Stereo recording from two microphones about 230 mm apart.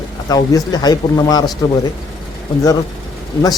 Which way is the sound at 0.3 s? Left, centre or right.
Centre.